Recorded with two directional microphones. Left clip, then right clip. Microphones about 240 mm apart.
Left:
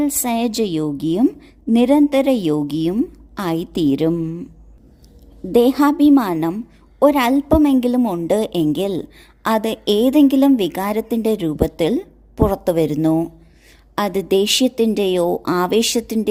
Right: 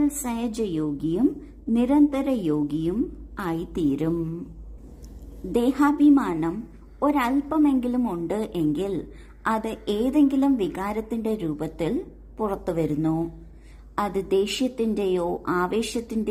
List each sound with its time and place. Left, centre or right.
0.0 s a woman's voice: left
5.5 s a woman's voice: left